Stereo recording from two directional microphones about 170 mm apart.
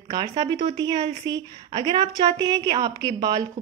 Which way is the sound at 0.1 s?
25° right (ahead or behind).